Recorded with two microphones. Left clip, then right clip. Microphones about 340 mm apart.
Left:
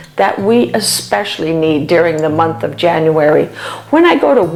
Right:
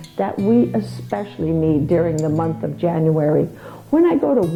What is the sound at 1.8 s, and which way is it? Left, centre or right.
Speech, centre.